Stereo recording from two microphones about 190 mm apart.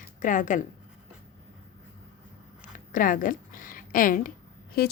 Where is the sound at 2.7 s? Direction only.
45° left (ahead or behind).